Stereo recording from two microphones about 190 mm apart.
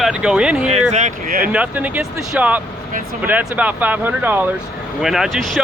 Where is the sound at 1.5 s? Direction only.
5° right (ahead or behind).